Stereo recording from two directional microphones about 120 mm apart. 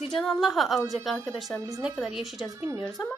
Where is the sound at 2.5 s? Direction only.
20° right (ahead or behind).